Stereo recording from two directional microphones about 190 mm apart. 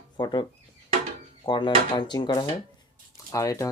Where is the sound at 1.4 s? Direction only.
25° left (ahead or behind).